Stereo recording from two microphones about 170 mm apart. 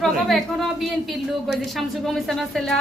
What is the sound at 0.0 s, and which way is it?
Speech, centre (ahead or behind).